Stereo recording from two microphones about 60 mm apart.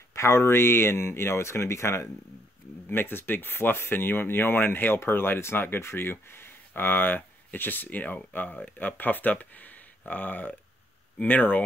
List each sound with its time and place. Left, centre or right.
0.1 s speech: left
2.9 s speech: left